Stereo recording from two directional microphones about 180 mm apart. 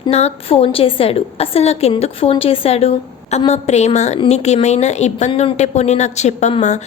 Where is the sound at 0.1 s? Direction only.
35° left (ahead or behind).